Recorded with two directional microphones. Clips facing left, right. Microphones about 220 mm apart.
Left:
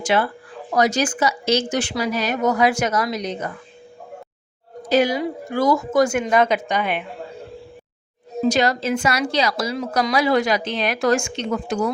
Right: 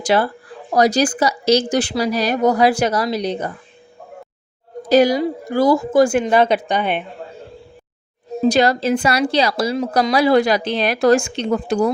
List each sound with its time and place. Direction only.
0.0 s a woman's voice: 35° right (ahead or behind)
4.9 s a woman's voice: 40° right (ahead or behind)
8.4 s a woman's voice: 35° right (ahead or behind)